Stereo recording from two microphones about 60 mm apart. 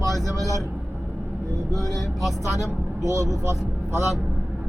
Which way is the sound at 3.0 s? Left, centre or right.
Right.